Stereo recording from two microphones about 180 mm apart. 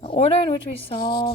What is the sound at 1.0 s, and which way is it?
Speech, 55° left (ahead or behind).